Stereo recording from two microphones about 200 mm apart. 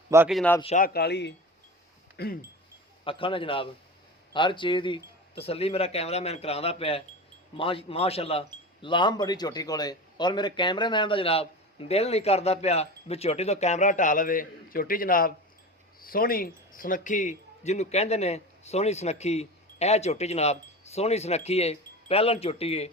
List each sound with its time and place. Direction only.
0.3 s a man's voice: centre (ahead or behind)
0.8 s speech: 55° left (ahead or behind)
3.0 s a man's voice: 25° left (ahead or behind)